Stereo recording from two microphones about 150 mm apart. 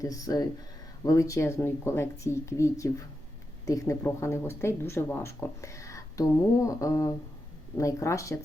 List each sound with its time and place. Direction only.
0.0 s speech: 25° left (ahead or behind)